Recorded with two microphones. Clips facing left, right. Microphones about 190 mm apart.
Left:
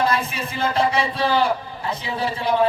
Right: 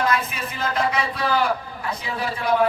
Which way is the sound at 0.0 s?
30° left (ahead or behind).